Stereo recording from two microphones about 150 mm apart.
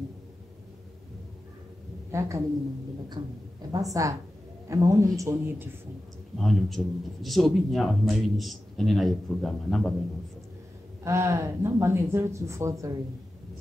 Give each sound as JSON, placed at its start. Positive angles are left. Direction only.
{"t": 2.0, "sound": "a woman's voice", "side_deg": -20}
{"t": 3.2, "sound": "a man's voice", "side_deg": -40}
{"t": 3.7, "sound": "speech", "side_deg": -20}
{"t": 6.3, "sound": "speech", "side_deg": 0}
{"t": 11.1, "sound": "speech", "side_deg": -20}